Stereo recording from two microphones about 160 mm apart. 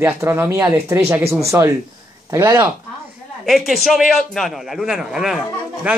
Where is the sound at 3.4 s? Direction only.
Centre (ahead or behind).